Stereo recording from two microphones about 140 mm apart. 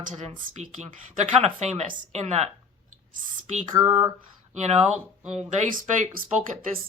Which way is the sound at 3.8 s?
45° right (ahead or behind).